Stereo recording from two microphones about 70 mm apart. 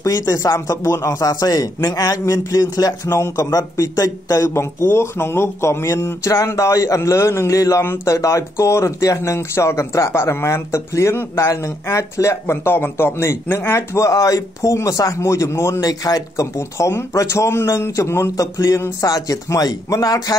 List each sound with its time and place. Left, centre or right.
0.0 s speech: left
1.3 s a man's voice: left
15.8 s a man's voice: left
16.5 s a man's voice: left